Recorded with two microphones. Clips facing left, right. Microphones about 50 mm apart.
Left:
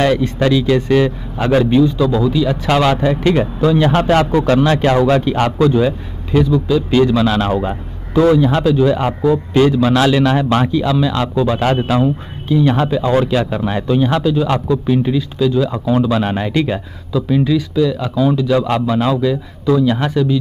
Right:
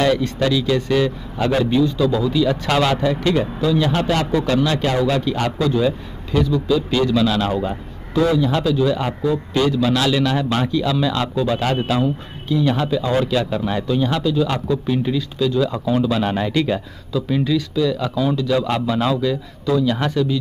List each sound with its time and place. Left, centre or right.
0.0 s a man's voice: left
3.0 s a man's voice: left
3.6 s a man's voice: left; by 20.3 s centre